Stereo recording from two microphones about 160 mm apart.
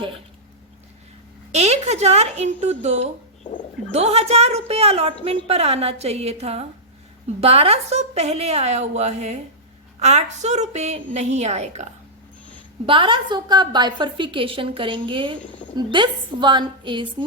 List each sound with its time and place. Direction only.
1.5 s a woman's voice: 45° right (ahead or behind)
12.8 s a woman's voice: 30° right (ahead or behind)